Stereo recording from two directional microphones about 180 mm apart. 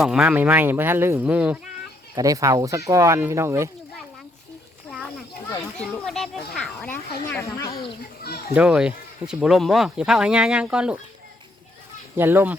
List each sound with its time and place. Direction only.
0.0 s speech: 5° right (ahead or behind)
2.1 s speech: 20° right (ahead or behind)
5.7 s children playing: 5° left (ahead or behind)
7.4 s a sound: 15° left (ahead or behind)
8.5 s speech: 5° right (ahead or behind)
12.1 s speech: 10° right (ahead or behind)